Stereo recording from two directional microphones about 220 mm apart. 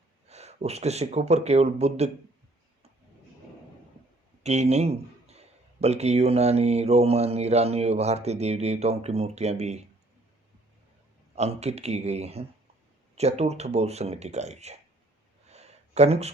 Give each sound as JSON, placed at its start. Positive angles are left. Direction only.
{"t": 0.3, "sound": "speech", "side_deg": -30}
{"t": 4.4, "sound": "speech", "side_deg": -30}
{"t": 11.3, "sound": "speech", "side_deg": -30}
{"t": 15.4, "sound": "a sound", "side_deg": -30}